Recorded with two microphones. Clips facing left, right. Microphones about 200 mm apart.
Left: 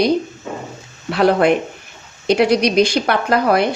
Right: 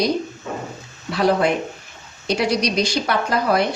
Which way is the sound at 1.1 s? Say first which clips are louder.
Left 4 dB; 60° left (ahead or behind).